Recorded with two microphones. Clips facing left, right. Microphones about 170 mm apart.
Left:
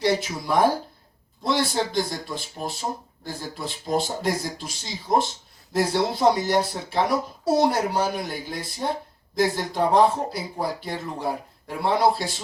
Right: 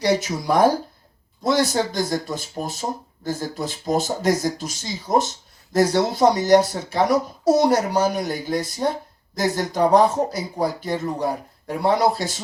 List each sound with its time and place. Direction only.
0.0 s speech: 45° right (ahead or behind)